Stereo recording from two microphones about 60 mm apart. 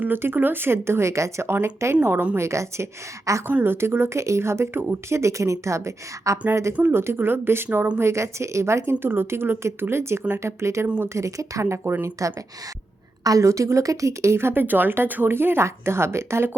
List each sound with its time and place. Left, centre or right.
0.0 s a woman's voice: right
3.4 s a woman's voice: right
7.9 s a woman's voice: right
11.6 s speech: right
12.2 s speech: right